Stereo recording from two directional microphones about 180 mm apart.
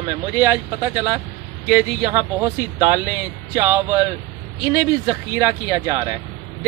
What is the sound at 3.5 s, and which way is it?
A man's voice, 15° right (ahead or behind).